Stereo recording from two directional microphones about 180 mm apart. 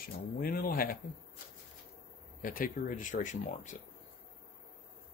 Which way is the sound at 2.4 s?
50° left (ahead or behind).